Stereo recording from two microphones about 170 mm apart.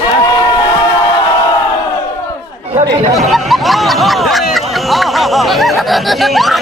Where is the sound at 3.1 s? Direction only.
Centre (ahead or behind).